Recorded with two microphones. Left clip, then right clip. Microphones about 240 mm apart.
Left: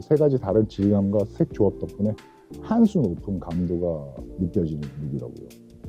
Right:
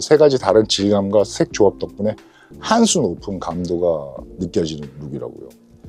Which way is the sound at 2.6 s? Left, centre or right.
Centre.